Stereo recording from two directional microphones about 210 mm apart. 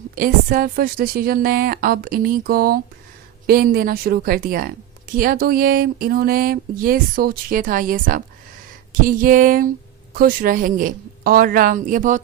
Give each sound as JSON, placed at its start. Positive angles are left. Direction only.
{"t": 0.2, "sound": "a woman's voice", "side_deg": -40}